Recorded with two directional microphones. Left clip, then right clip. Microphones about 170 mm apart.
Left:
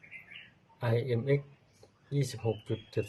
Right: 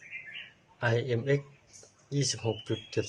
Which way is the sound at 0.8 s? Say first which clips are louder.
Right 3 dB; 15° left (ahead or behind).